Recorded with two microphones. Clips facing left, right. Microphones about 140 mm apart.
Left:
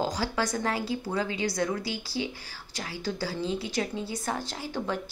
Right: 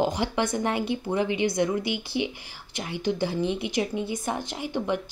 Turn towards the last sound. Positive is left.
turn(degrees=-20)  # may be behind; listen again after turning